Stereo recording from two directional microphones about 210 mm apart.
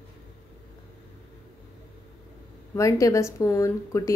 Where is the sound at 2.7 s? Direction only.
15° left (ahead or behind).